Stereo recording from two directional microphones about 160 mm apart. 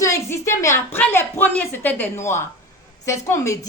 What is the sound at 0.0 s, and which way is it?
A woman's voice, 20° left (ahead or behind).